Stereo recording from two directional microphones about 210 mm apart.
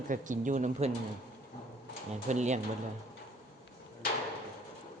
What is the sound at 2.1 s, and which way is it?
Speech, 35° right (ahead or behind).